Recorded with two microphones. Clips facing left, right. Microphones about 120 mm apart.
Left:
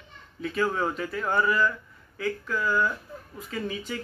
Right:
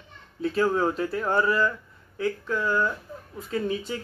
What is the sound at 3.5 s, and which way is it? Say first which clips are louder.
Speech: right 5 dB; 30° right (ahead or behind).